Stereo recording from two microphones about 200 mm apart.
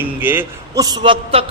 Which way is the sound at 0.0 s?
10° right (ahead or behind).